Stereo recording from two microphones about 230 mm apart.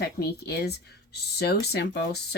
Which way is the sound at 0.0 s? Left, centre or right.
Left.